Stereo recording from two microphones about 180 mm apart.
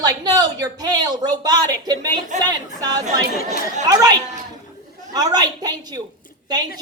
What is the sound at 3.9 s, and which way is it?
Speech, 20° right (ahead or behind).